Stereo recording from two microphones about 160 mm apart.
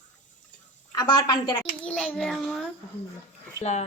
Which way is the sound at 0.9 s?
25° left (ahead or behind).